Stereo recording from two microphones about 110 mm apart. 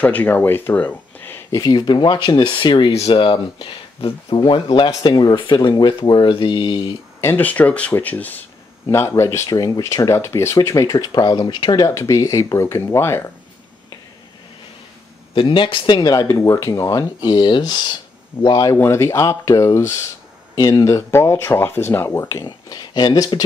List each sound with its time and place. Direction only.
0.0 s speech: 15° left (ahead or behind)
1.5 s speech: 35° left (ahead or behind)
7.2 s speech: 20° left (ahead or behind)
8.8 s speech: 25° left (ahead or behind); by 11.7 s 45° left (ahead or behind)
11.7 s speech: 30° left (ahead or behind)
15.3 s speech: 50° left (ahead or behind); by 16.9 s 25° left (ahead or behind)
16.9 s speech: 40° left (ahead or behind)
18.8 s speech: 25° left (ahead or behind)
20.5 s speech: 35° left (ahead or behind)